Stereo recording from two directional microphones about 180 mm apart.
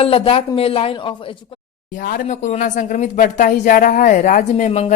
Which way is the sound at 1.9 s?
50° left (ahead or behind).